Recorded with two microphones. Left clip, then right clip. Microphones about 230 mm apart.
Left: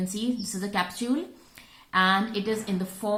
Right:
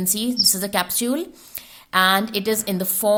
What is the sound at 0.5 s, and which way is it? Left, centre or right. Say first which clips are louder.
Speech: right 6 dB; right.